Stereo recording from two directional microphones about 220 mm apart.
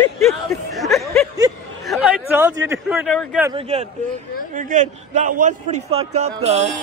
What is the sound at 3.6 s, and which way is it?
A man's voice, 25° right (ahead or behind).